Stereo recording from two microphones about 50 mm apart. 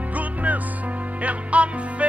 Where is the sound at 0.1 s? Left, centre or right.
Right.